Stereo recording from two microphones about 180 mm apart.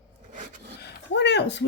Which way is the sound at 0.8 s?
70° left (ahead or behind).